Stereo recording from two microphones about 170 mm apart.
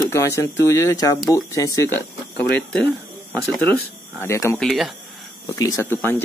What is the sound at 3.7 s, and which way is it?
Speech, 15° left (ahead or behind).